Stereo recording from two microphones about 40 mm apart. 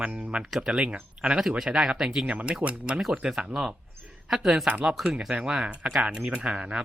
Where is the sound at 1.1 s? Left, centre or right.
Right.